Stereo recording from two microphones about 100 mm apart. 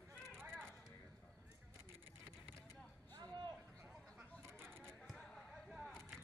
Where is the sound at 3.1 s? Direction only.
45° right (ahead or behind).